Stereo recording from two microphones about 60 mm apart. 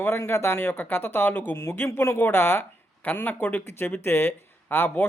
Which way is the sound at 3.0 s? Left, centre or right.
Left.